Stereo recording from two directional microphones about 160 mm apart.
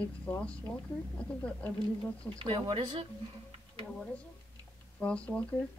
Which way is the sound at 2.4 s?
30° right (ahead or behind).